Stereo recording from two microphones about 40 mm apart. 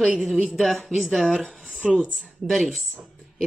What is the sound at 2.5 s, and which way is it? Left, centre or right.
Speech, centre.